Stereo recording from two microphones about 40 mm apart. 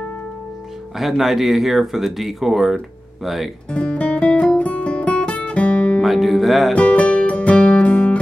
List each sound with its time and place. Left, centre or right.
0.9 s speech: centre
3.7 s music: left
6.0 s speech: centre
6.7 s music: left